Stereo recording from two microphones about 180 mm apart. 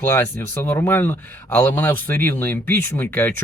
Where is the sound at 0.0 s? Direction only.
10° left (ahead or behind).